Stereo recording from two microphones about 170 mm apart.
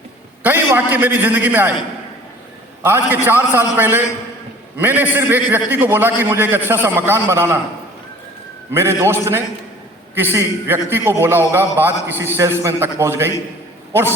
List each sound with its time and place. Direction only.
0.4 s a man's voice: 10° right (ahead or behind)
2.8 s a man's voice: 10° right (ahead or behind)
8.7 s a man's voice: 15° right (ahead or behind)